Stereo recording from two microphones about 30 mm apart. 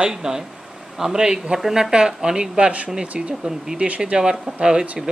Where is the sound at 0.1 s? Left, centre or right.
Centre.